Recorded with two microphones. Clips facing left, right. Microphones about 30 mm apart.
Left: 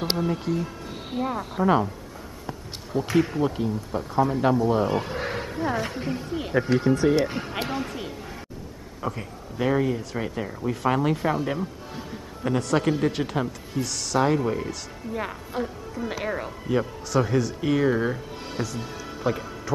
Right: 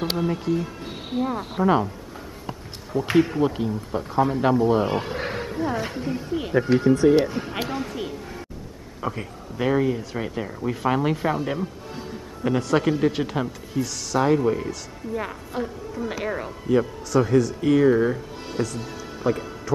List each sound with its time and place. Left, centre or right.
0.2 s speech: centre
3.2 s speech: centre
5.3 s a sound: centre
6.1 s speech: centre
7.7 s a sound: centre
9.0 s speech: centre
19.1 s music: centre